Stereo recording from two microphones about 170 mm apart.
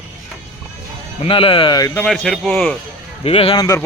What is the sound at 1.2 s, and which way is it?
Speech, 35° left (ahead or behind).